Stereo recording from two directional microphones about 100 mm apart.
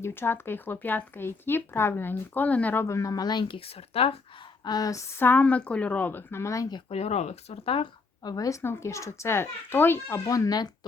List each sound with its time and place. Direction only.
0.0 s speech: 20° left (ahead or behind)
2.8 s speech: 30° left (ahead or behind); by 3.6 s 45° left (ahead or behind)
3.6 s speech: 75° left (ahead or behind)
4.6 s speech: 40° left (ahead or behind)
5.2 s a woman's voice: 15° left (ahead or behind)
6.9 s speech: 90° left; by 7.9 s 70° left (ahead or behind)
8.2 s speech: 40° left (ahead or behind); by 10.2 s 20° left (ahead or behind)
10.2 s speech: 35° left (ahead or behind)